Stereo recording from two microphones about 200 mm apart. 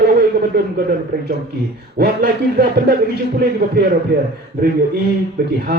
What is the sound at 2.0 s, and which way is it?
A man's voice, 55° right (ahead or behind).